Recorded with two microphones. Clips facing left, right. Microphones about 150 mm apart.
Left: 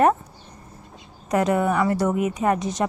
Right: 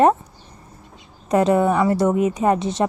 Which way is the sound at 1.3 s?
25° right (ahead or behind).